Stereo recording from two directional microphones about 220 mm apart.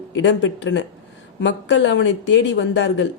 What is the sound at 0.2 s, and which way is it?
Speech, 55° left (ahead or behind).